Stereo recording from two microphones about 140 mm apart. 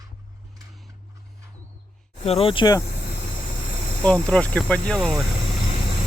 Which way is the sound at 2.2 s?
45° left (ahead or behind).